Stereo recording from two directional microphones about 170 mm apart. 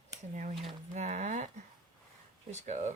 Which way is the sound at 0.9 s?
45° right (ahead or behind).